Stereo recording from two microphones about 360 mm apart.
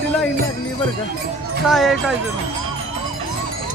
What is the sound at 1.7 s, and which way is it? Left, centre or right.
Speech, centre.